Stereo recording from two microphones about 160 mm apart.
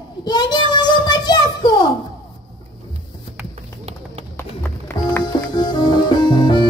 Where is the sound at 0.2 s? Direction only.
25° left (ahead or behind).